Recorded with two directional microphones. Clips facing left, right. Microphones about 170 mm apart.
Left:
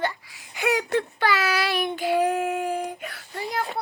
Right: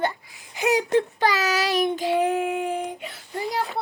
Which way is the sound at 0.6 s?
35° right (ahead or behind).